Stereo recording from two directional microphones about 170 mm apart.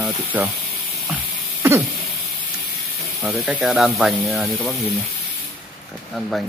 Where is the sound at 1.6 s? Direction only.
15° right (ahead or behind).